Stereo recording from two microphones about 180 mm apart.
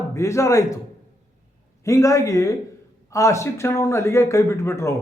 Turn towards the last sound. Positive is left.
turn(degrees=15)  # may be behind; listen again after turning